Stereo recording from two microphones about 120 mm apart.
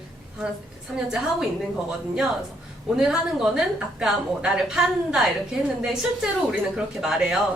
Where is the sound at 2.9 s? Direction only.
5° right (ahead or behind).